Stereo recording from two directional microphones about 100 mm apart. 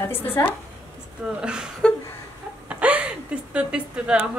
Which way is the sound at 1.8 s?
10° left (ahead or behind).